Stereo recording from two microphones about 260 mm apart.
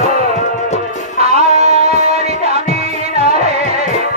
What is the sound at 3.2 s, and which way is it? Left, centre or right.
Music, right.